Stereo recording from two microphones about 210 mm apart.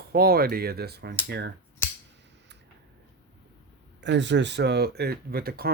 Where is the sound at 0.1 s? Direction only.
45° right (ahead or behind).